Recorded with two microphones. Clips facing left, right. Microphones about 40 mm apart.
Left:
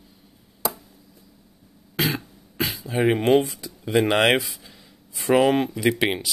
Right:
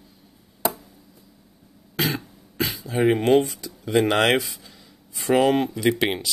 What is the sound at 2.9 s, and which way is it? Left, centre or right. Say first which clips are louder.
Speech: right 1 dB; centre.